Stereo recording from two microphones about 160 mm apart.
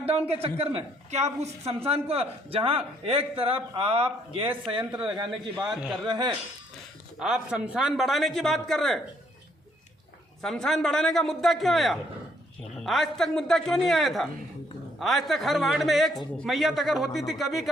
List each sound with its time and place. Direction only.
0.0 s a man's voice: 40° right (ahead or behind)
7.2 s speech: 5° right (ahead or behind)
10.4 s speech: 5° left (ahead or behind)